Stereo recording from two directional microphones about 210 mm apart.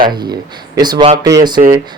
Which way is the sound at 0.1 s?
20° right (ahead or behind).